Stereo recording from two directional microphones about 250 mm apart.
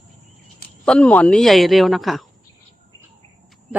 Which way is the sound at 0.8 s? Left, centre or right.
Centre.